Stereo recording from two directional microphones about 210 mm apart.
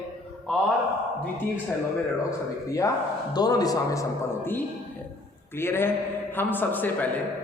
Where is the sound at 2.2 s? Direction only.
15° left (ahead or behind).